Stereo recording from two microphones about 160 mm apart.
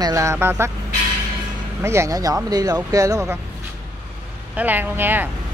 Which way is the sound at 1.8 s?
15° right (ahead or behind).